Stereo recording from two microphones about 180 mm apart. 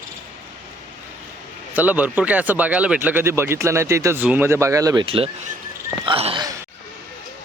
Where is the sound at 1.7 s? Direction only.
10° right (ahead or behind).